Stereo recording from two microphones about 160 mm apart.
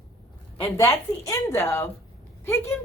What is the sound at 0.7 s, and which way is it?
A woman's voice, 20° left (ahead or behind).